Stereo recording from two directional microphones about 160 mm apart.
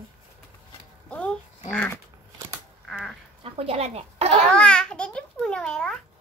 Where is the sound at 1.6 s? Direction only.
10° left (ahead or behind).